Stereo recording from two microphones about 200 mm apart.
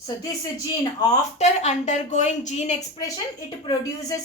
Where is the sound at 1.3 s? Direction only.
35° left (ahead or behind).